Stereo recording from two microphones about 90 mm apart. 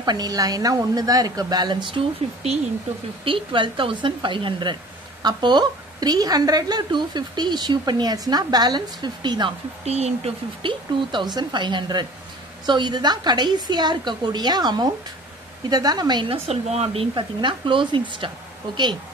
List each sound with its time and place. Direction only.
0.0 s a woman's voice: 50° right (ahead or behind); by 2.0 s 65° right (ahead or behind)
3.3 s a woman's voice: 70° right (ahead or behind)
10.2 s a woman's voice: 70° right (ahead or behind); by 16.3 s 50° right (ahead or behind)
16.3 s speech: 90° right; by 18.3 s 65° right (ahead or behind)